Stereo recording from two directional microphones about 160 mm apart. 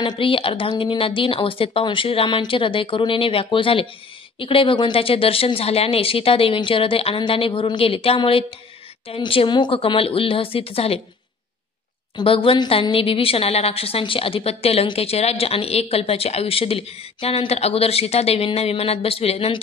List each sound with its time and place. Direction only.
0.0 s a woman's voice: 30° left (ahead or behind)
12.2 s a woman's voice: 35° left (ahead or behind)